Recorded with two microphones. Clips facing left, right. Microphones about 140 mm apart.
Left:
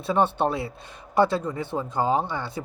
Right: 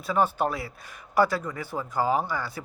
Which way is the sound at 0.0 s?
30° left (ahead or behind).